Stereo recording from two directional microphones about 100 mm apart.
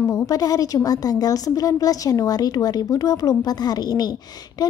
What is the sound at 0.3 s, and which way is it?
A woman's voice, 40° left (ahead or behind).